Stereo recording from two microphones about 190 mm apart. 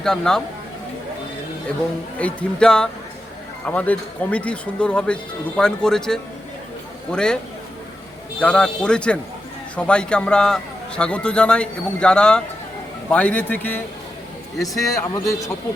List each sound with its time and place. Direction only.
0.0 s a man's voice: centre (ahead or behind)
2.1 s a man's voice: 5° left (ahead or behind)
8.4 s a man's voice: 5° left (ahead or behind)
14.9 s a man's voice: 15° left (ahead or behind)